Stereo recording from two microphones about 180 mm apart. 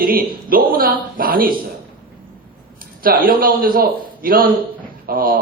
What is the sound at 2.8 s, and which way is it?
A man's voice, 55° right (ahead or behind).